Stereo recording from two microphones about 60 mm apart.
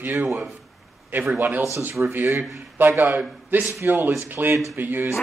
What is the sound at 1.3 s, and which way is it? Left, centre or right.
Speech, right.